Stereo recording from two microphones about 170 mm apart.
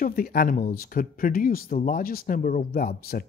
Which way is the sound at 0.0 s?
60° left (ahead or behind).